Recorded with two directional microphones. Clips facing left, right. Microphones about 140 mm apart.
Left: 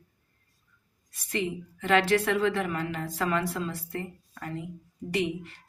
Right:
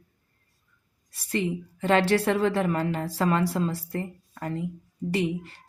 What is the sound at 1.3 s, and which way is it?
A woman's voice, 35° right (ahead or behind).